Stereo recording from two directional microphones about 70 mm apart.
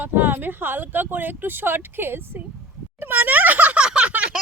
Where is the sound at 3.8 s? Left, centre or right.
Centre.